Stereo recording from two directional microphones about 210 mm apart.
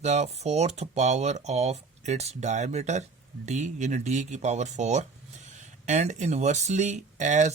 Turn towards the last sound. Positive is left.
turn(degrees=-35)  # may be behind; listen again after turning